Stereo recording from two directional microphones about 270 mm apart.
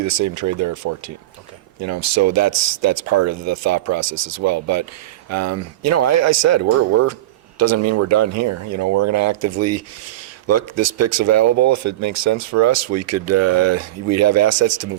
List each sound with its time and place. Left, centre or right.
0.0 s speech: right
1.8 s speech: right